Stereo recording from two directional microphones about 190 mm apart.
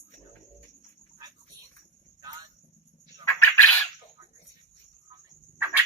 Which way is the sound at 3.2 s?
10° left (ahead or behind).